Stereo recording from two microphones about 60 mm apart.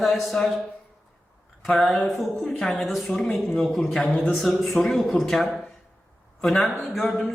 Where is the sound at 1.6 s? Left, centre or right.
Centre.